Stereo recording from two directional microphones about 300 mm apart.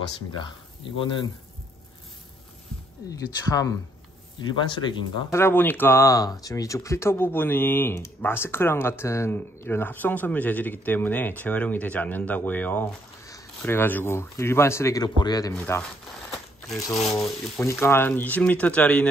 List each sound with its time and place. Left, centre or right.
0.9 s speech: centre
3.4 s speech: centre
16.3 s a sound: centre
17.1 s speech: centre